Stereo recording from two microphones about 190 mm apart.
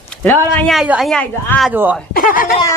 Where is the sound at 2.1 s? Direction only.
45° left (ahead or behind).